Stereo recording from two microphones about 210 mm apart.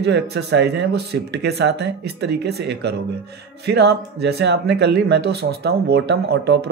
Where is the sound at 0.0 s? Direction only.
55° right (ahead or behind).